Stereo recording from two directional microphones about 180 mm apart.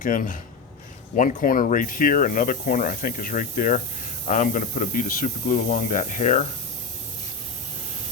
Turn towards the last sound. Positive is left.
turn(degrees=40)  # may be behind; listen again after turning